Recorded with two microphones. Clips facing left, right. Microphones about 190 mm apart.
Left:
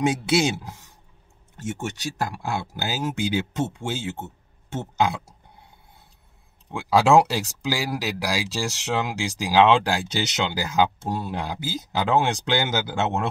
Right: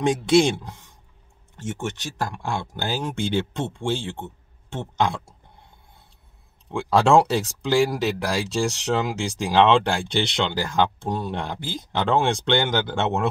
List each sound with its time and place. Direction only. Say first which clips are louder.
0.0 s speech: right 3 dB; 5° left (ahead or behind)
2.1 s speech: even; 5° left (ahead or behind)
6.7 s speech: even; 5° left (ahead or behind)